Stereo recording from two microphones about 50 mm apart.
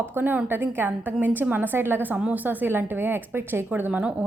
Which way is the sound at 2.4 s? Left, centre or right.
Right.